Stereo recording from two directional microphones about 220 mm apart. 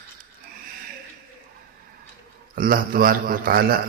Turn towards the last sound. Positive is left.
turn(degrees=-40)  # may be behind; listen again after turning